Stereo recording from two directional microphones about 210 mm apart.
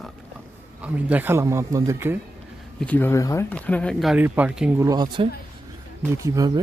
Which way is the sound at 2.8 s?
10° left (ahead or behind).